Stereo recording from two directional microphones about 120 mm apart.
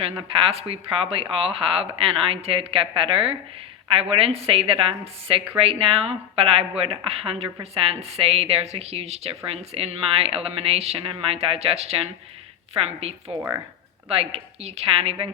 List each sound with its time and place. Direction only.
0.2 s a woman's voice: 50° right (ahead or behind)
13.0 s a woman's voice: 55° right (ahead or behind)